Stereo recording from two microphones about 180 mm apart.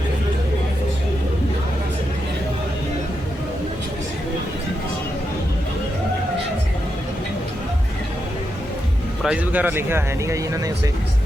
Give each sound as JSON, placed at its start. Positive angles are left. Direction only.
{"t": 9.2, "sound": "speech", "side_deg": -5}